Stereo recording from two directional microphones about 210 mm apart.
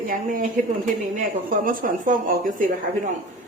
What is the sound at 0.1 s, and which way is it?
Speech, 40° right (ahead or behind).